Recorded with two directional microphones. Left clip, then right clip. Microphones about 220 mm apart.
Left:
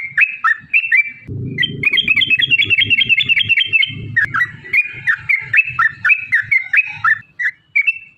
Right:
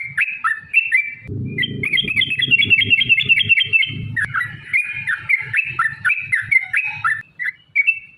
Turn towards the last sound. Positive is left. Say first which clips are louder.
# left 2 dB
turn(degrees=15)  # may be behind; listen again after turning